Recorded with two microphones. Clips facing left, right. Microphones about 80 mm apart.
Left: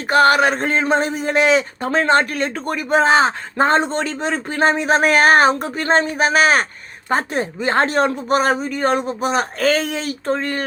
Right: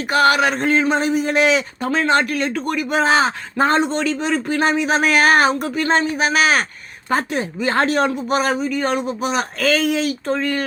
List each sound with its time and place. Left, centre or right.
0.1 s a man's voice: left